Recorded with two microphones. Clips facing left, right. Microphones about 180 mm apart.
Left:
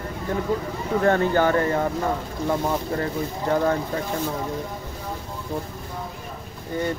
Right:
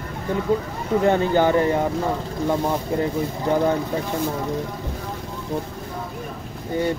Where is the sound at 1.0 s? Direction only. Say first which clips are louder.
Right 1 dB; 15° right (ahead or behind).